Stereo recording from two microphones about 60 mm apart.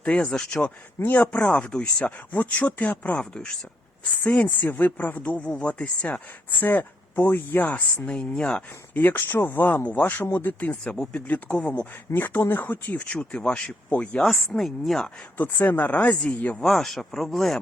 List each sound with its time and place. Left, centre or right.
0.0 s speech: centre
1.1 s speech: left
7.9 s speech: centre
9.0 s speech: left
11.1 s speech: left
11.8 s speech: left
13.1 s speech: centre
14.2 s speech: centre
15.4 s speech: left
16.6 s speech: centre